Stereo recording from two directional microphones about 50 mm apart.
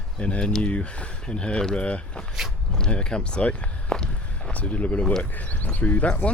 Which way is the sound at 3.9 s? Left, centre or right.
Centre.